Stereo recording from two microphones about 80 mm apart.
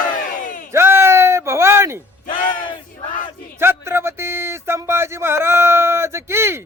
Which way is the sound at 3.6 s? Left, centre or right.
Right.